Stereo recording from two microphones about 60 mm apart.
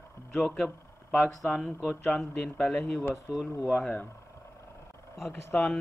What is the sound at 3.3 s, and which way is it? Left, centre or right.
Speech, centre.